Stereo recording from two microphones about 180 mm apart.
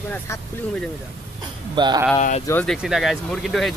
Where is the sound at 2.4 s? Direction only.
10° left (ahead or behind).